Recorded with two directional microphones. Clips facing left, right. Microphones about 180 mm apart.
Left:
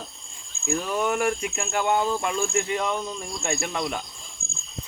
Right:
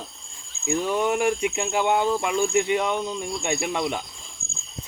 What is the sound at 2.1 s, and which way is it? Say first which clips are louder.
Speech: right 3 dB; 5° right (ahead or behind).